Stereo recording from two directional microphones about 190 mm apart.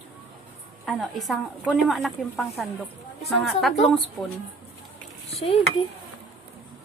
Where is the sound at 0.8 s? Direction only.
Centre (ahead or behind).